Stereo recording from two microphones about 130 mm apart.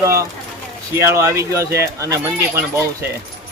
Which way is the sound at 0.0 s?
25° right (ahead or behind).